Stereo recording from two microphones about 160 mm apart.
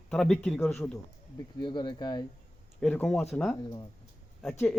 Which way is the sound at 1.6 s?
25° left (ahead or behind).